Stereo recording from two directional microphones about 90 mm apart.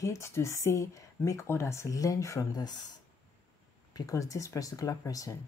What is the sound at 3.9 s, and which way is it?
Speech, 40° left (ahead or behind).